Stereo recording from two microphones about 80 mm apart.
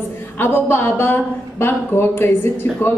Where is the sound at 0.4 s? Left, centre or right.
Left.